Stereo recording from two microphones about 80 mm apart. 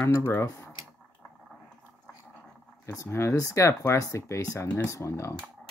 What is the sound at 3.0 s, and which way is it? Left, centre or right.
Speech, left.